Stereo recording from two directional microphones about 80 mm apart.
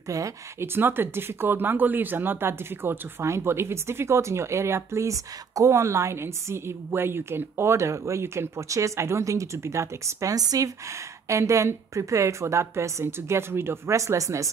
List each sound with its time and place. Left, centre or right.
0.1 s speech: right
0.6 s speech: right